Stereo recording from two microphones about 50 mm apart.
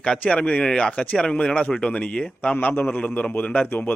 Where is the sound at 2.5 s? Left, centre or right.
Left.